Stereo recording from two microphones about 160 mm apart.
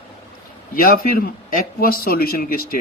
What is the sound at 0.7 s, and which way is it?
Speech, 65° left (ahead or behind).